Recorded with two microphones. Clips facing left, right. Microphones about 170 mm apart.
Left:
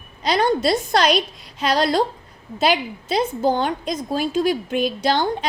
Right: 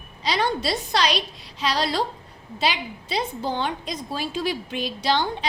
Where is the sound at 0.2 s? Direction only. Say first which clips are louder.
Left 6 dB; 45° left (ahead or behind).